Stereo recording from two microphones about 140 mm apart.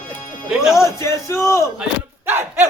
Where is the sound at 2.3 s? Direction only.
15° right (ahead or behind).